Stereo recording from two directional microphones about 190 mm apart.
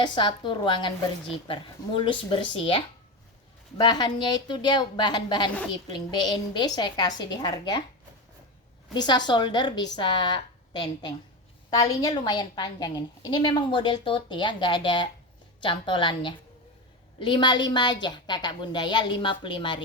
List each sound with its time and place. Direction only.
0.0 s a woman's voice: 25° left (ahead or behind)
2.0 s a woman's voice: 25° left (ahead or behind)
8.9 s a woman's voice: 20° left (ahead or behind)